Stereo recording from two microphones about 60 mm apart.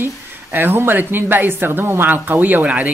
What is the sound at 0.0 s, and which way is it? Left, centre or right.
Speech, right.